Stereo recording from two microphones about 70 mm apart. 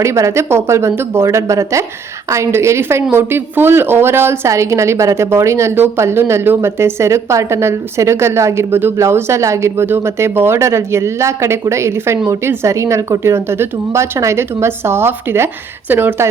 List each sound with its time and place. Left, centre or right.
0.0 s a woman's voice: right